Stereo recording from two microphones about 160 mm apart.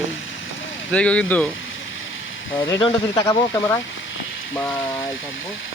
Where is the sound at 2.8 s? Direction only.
25° left (ahead or behind).